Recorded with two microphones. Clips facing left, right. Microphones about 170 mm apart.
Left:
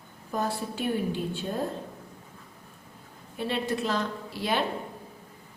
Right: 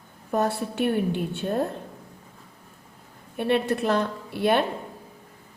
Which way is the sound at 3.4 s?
60° right (ahead or behind).